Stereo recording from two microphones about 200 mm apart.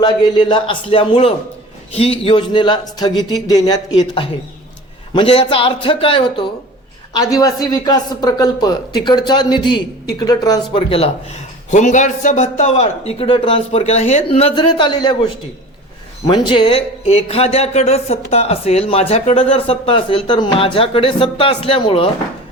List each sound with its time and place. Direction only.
0.0 s a man's voice: 20° left (ahead or behind)
16.5 s a man's voice: 25° left (ahead or behind)